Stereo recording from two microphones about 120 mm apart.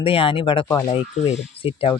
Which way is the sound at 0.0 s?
50° left (ahead or behind).